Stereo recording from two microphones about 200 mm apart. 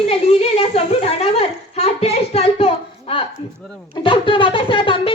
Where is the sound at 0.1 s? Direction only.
30° left (ahead or behind).